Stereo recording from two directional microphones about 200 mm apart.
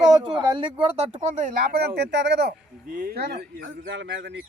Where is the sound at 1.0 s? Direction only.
40° right (ahead or behind).